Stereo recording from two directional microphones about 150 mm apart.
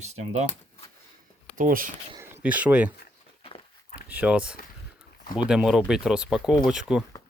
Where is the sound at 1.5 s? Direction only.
65° right (ahead or behind).